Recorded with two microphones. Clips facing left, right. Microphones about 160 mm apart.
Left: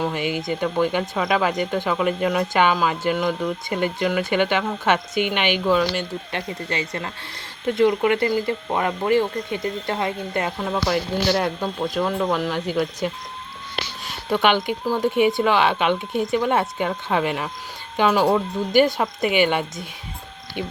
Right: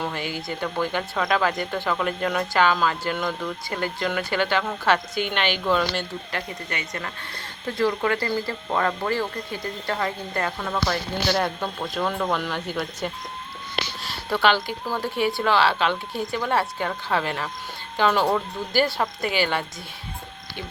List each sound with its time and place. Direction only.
0.0 s speech: 15° left (ahead or behind)
6.3 s speech: 25° left (ahead or behind)
11.3 s speech: 5° left (ahead or behind)
14.3 s speech: 15° left (ahead or behind)